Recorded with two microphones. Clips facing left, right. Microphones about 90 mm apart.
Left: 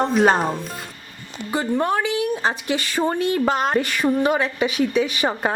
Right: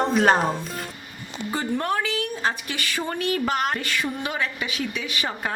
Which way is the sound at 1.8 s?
20° left (ahead or behind).